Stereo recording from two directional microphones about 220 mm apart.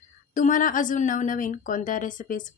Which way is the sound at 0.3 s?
35° left (ahead or behind).